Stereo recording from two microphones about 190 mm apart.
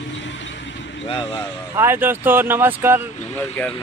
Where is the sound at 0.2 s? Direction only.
75° left (ahead or behind).